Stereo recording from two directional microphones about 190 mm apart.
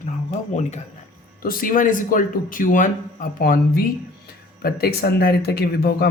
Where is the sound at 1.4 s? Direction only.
50° left (ahead or behind).